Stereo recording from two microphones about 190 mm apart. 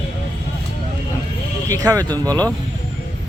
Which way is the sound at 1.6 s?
15° right (ahead or behind).